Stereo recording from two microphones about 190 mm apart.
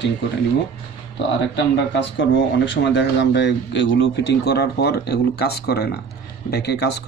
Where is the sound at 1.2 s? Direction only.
70° left (ahead or behind).